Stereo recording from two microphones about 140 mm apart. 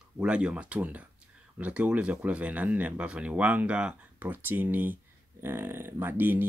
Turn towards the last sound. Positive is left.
turn(degrees=-15)  # may be behind; listen again after turning